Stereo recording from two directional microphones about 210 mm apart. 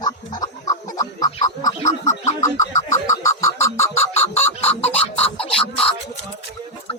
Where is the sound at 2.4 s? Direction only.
15° left (ahead or behind).